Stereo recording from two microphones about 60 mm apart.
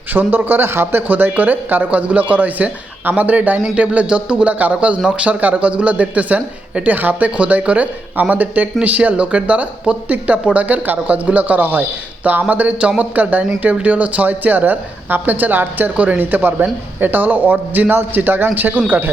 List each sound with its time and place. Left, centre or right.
0.1 s speech: right